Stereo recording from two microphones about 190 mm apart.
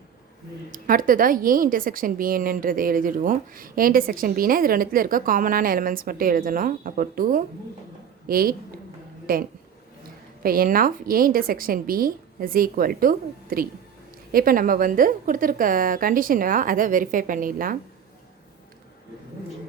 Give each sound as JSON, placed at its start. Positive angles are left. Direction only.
{"t": 0.7, "sound": "a woman's voice", "side_deg": -45}